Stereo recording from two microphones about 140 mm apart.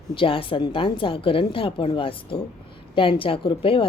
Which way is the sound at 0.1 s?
40° left (ahead or behind).